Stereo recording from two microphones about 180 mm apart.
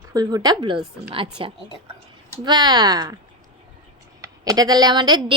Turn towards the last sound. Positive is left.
turn(degrees=-25)  # may be behind; listen again after turning